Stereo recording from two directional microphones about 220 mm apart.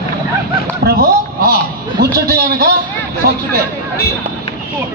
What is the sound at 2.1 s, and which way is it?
A man's voice, 45° right (ahead or behind).